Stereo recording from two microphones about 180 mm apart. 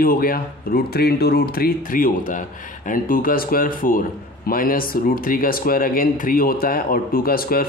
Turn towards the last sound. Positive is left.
turn(degrees=55)  # may be behind; listen again after turning